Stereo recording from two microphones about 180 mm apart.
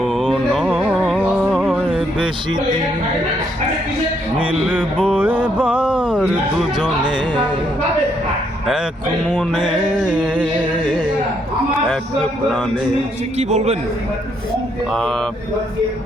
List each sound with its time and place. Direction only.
0.0 s music: 5° left (ahead or behind)
5.0 s speech: 10° right (ahead or behind)
9.2 s music: 10° left (ahead or behind)
10.2 s speech: 5° right (ahead or behind)
13.3 s a man's voice: 40° right (ahead or behind)
14.9 s speech: centre (ahead or behind)